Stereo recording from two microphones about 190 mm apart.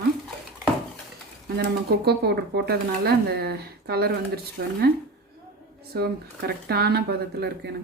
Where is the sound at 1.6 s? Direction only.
55° right (ahead or behind).